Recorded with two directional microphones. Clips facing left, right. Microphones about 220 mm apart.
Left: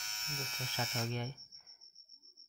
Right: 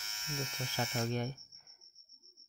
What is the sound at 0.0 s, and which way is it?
Electric shaver, centre (ahead or behind).